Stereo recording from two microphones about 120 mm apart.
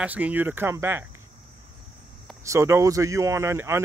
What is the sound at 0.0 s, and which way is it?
Speech, 15° right (ahead or behind).